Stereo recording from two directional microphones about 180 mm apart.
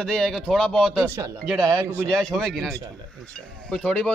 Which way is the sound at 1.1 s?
15° right (ahead or behind).